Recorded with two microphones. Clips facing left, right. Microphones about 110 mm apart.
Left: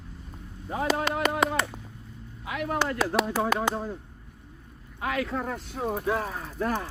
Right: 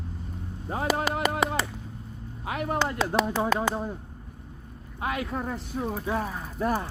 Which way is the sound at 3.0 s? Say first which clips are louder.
Even; 10° left (ahead or behind).